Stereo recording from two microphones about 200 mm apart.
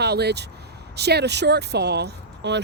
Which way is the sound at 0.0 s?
55° right (ahead or behind).